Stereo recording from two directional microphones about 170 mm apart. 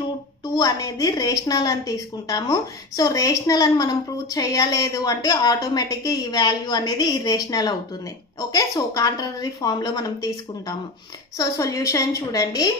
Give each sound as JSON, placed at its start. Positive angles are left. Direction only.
{"t": 0.6, "sound": "a woman's voice", "side_deg": 20}